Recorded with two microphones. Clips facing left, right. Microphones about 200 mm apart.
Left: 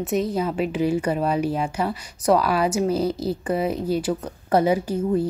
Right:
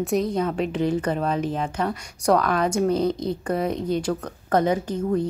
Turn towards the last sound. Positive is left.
turn(degrees=5)  # may be behind; listen again after turning